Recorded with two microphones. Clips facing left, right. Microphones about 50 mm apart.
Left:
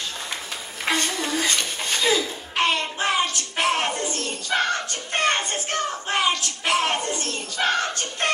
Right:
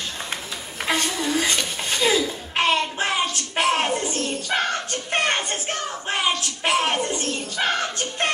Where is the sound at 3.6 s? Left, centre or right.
Right.